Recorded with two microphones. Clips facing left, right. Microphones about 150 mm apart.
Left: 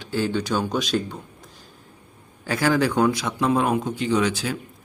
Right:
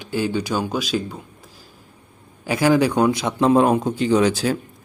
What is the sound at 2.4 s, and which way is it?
A man's voice, 15° right (ahead or behind).